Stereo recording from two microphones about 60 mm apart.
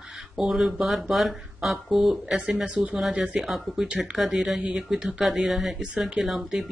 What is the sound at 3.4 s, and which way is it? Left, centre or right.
Speech, centre.